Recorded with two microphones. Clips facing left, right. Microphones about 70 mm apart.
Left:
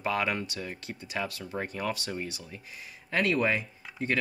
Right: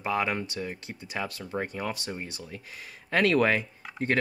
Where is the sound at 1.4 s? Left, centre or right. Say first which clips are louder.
Right 1 dB; centre.